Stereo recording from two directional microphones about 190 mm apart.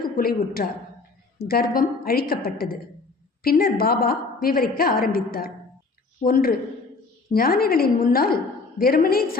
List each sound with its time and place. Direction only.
0.0 s a woman's voice: 50° left (ahead or behind)